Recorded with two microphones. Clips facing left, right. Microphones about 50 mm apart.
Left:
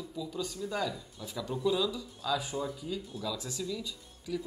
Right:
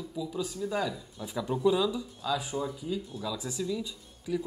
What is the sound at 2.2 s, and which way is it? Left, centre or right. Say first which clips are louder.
Speech: right 1 dB; centre.